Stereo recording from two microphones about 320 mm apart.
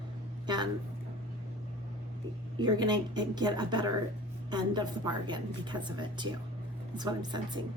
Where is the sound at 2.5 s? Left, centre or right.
Centre.